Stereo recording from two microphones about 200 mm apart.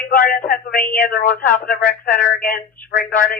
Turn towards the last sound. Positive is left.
turn(degrees=45)  # may be behind; listen again after turning